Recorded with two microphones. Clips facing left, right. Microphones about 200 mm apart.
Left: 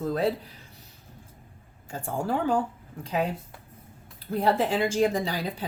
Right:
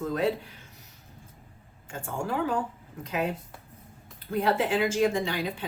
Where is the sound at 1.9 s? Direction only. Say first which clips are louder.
Left 3 dB; 35° left (ahead or behind).